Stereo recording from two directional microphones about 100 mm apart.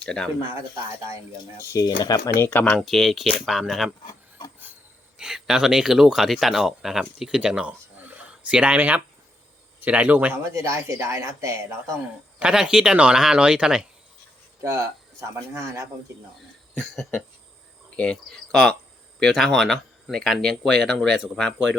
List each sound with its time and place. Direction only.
0.0 s speech: 10° left (ahead or behind)
1.7 s speech: 40° left (ahead or behind)
2.4 s speech: 15° left (ahead or behind)
2.7 s speech: centre (ahead or behind)
4.0 s rub: 40° left (ahead or behind)
5.1 s speech: 5° right (ahead or behind)
10.4 s speech: 30° right (ahead or behind)
12.4 s speech: 10° right (ahead or behind)
14.6 s speech: 30° right (ahead or behind)
16.7 s speech: centre (ahead or behind)